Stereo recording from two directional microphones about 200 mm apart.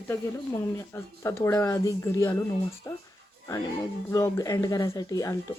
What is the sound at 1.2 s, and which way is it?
Speech, 15° left (ahead or behind).